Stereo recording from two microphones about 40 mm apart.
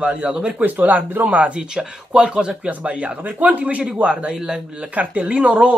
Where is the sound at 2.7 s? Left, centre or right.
Right.